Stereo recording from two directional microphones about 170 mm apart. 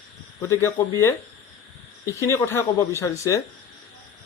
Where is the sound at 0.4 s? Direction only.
15° left (ahead or behind).